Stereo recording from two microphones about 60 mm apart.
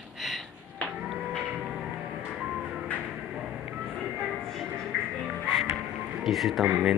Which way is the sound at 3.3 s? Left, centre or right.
Centre.